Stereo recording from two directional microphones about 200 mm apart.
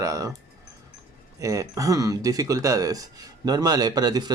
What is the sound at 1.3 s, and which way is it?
Speech, 15° right (ahead or behind).